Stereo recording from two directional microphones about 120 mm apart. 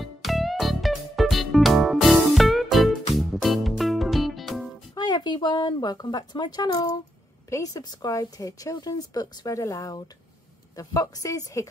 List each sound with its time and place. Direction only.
0.0 s music: centre (ahead or behind)
4.9 s speech: 35° left (ahead or behind)